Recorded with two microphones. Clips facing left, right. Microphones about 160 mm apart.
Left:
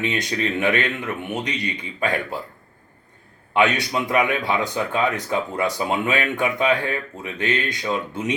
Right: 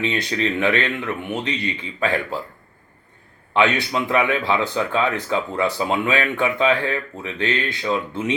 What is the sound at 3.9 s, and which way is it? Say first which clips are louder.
Speech: even; 15° left (ahead or behind).